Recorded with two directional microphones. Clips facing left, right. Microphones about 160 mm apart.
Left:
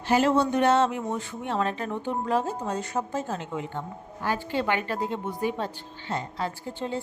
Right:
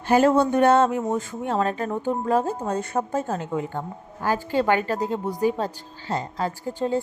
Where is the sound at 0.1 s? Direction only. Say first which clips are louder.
Right 4 dB; 50° right (ahead or behind).